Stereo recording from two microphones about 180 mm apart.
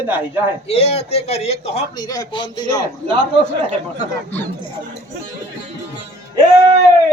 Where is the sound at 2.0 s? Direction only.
20° left (ahead or behind).